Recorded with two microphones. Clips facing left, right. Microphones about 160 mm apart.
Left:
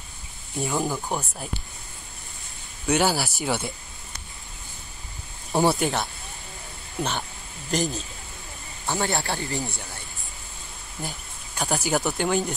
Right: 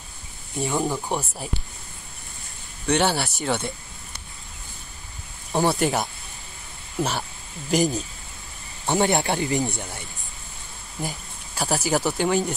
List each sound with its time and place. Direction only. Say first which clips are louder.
0.6 s speech: right 2 dB; centre (ahead or behind)
2.9 s speech: right 1 dB; centre (ahead or behind)
5.7 s speech: right 1 dB; centre (ahead or behind)
7.0 s speech: right 2 dB; 5° right (ahead or behind)
7.7 s speech: right 5 dB; 15° right (ahead or behind)
11.0 s speech: right 4 dB; 5° right (ahead or behind)